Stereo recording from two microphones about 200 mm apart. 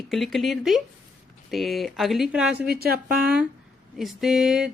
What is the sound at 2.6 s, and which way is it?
Speech, 50° right (ahead or behind).